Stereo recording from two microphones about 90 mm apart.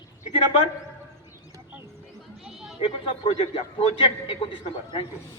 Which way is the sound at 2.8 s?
90° left.